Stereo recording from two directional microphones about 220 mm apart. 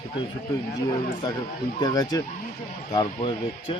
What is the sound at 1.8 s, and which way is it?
Speech, 15° left (ahead or behind).